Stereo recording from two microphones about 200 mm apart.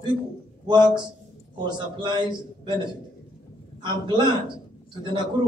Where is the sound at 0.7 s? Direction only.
20° right (ahead or behind).